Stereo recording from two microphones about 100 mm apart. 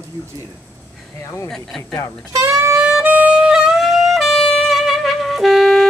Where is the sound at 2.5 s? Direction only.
30° right (ahead or behind).